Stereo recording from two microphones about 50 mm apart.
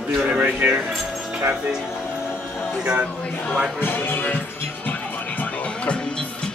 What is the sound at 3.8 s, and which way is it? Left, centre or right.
Music, left.